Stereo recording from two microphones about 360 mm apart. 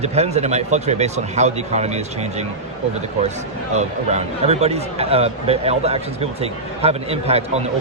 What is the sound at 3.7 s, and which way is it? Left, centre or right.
Speech, centre.